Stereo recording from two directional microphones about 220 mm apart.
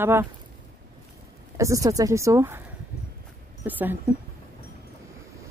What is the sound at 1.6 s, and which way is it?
Speech, 15° right (ahead or behind).